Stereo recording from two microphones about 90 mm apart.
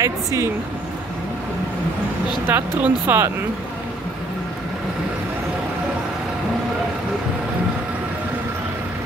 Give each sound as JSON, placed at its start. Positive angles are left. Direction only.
{"t": 0.0, "sound": "speech", "side_deg": -35}
{"t": 2.4, "sound": "speech", "side_deg": -20}